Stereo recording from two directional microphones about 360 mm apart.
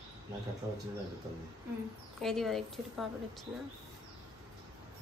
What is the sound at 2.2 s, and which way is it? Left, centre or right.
Speech, centre.